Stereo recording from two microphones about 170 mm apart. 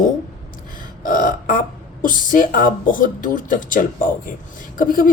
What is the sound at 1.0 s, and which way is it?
Speech, 55° left (ahead or behind).